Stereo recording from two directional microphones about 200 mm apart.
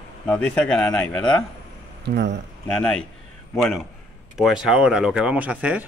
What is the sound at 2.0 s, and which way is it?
Speech, 55° right (ahead or behind).